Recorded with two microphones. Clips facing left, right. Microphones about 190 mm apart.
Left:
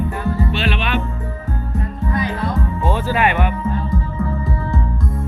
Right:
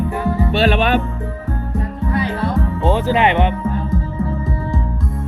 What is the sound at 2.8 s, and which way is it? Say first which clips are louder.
Speech: right 3 dB; 20° right (ahead or behind).